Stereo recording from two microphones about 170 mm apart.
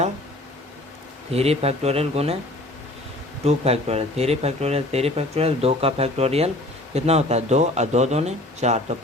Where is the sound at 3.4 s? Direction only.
35° right (ahead or behind).